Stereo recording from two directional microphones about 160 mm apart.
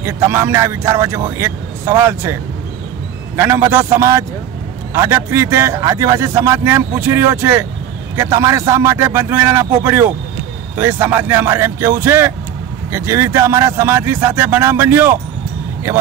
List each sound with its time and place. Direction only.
0.0 s speech: 15° right (ahead or behind)
3.3 s speech: 15° right (ahead or behind)